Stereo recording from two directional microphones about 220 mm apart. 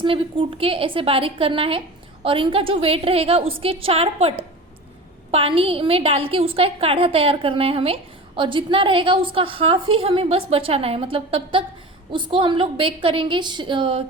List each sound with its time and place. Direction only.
0.0 s a woman's voice: 25° right (ahead or behind)